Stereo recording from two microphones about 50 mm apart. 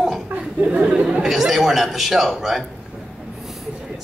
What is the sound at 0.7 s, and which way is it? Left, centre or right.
Speech, right.